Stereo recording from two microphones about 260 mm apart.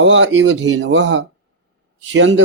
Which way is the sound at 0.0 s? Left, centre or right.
Right.